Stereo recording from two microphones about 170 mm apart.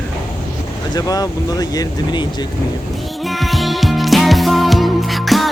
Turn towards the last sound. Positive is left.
turn(degrees=0)  # may be behind; listen again after turning